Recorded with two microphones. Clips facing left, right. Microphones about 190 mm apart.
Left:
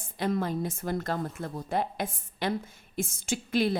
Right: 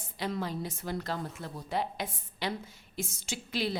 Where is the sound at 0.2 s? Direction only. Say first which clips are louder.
Left 5 dB; 50° left (ahead or behind).